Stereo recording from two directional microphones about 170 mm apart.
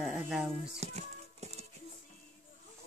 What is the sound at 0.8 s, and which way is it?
Music, 40° right (ahead or behind).